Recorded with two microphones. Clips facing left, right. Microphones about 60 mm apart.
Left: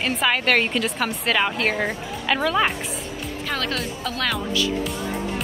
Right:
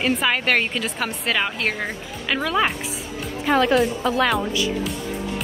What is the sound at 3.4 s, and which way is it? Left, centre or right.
Speech, centre.